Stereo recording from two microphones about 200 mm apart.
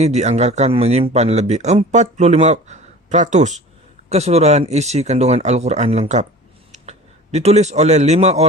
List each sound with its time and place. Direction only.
0.0 s a man's voice: 35° right (ahead or behind)